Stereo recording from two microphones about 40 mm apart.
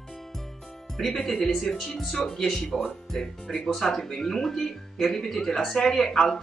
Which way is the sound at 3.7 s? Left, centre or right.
Centre.